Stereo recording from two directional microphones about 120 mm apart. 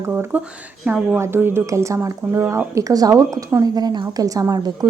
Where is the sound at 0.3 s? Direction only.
15° right (ahead or behind).